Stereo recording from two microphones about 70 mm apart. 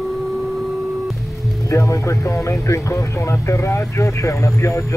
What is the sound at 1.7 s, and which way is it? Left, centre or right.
Speech, left.